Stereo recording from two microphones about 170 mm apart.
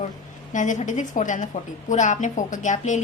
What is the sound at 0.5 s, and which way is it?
A woman's voice, 45° left (ahead or behind).